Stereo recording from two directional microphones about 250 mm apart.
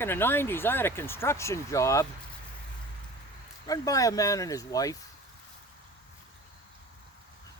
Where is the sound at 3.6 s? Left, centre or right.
Centre.